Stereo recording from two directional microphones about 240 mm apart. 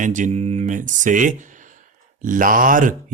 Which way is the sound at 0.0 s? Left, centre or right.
Right.